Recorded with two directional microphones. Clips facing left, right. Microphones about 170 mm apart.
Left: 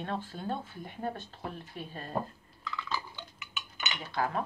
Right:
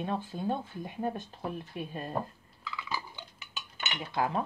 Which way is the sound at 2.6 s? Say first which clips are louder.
Left 1 dB; 10° right (ahead or behind).